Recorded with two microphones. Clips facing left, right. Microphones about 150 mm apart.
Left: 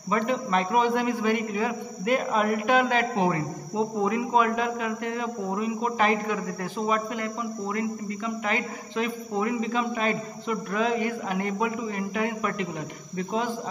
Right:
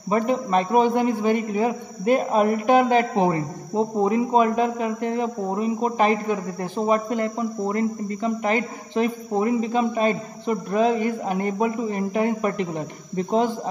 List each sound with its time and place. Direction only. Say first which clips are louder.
0.3 s a man's voice: right 5 dB; 30° right (ahead or behind)